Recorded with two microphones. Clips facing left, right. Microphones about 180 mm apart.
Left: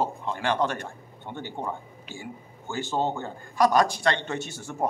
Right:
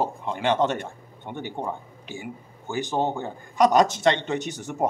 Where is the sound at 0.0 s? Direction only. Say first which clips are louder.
Right 2 dB; 15° right (ahead or behind).